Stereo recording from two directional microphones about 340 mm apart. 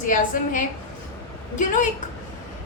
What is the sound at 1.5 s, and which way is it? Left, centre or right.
Speech, left.